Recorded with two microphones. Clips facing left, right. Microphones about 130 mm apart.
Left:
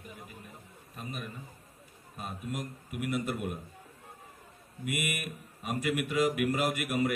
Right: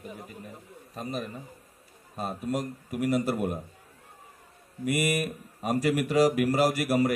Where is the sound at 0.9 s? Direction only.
35° right (ahead or behind).